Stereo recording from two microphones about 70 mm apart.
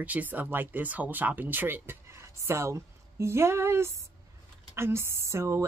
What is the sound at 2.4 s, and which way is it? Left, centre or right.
A woman's voice, right.